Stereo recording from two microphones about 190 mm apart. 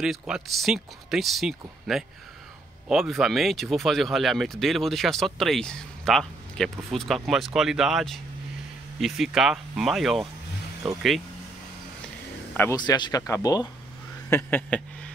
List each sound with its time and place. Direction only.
0.0 s speech: centre (ahead or behind)
12.5 s speech: 15° left (ahead or behind)